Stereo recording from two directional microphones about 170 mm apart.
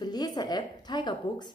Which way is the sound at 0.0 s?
25° left (ahead or behind).